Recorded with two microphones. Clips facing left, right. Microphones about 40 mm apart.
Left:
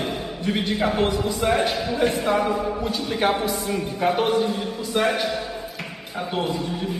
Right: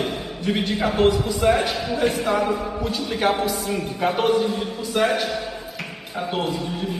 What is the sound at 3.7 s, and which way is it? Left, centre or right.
A man's voice, centre.